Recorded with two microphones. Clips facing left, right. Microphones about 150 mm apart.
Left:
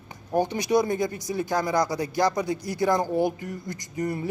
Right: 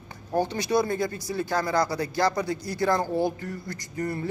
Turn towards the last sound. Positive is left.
turn(degrees=15)  # may be behind; listen again after turning